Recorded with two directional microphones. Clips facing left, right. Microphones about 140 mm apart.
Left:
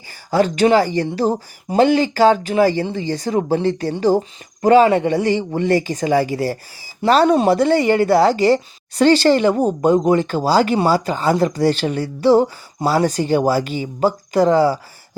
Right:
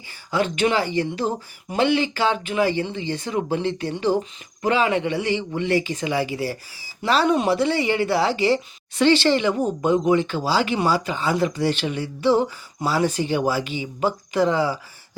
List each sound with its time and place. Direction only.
0.3 s a man's voice: 40° left (ahead or behind)